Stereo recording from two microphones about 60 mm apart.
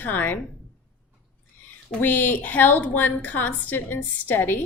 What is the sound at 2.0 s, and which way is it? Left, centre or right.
A woman's voice, left.